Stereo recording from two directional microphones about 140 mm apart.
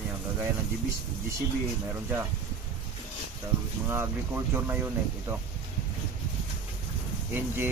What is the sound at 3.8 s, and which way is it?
Speech, 15° right (ahead or behind).